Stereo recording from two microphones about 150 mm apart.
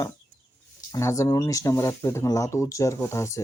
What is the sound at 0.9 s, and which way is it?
Speech, 20° left (ahead or behind).